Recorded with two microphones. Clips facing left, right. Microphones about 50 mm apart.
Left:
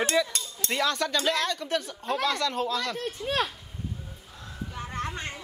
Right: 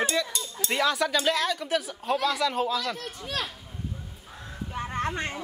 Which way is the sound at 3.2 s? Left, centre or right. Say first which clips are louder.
Left 4 dB; centre.